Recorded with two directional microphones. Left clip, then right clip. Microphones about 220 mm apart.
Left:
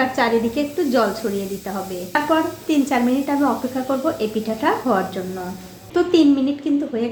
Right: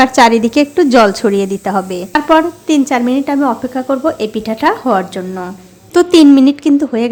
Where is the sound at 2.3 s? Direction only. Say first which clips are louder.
Right 11 dB; 35° right (ahead or behind).